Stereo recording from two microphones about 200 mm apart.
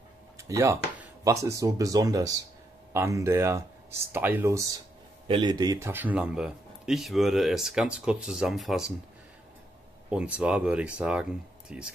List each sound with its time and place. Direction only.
0.4 s speech: 15° right (ahead or behind)
10.0 s speech: 5° right (ahead or behind)